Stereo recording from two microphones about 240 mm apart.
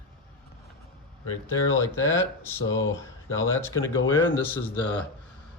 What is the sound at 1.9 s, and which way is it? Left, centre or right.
Speech, left.